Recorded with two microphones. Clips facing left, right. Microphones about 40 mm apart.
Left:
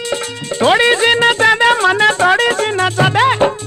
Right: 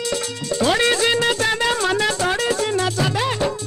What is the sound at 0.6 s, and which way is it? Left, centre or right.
Music, left.